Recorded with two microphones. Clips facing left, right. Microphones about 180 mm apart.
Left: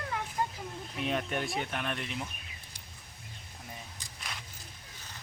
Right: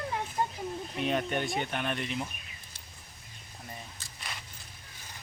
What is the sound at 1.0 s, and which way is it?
Speech, centre (ahead or behind).